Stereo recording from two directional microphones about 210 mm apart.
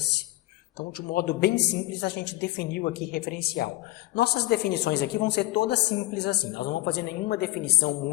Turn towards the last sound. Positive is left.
turn(degrees=50)  # may be behind; listen again after turning